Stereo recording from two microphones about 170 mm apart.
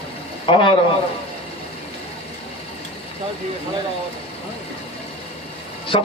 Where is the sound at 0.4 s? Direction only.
30° left (ahead or behind).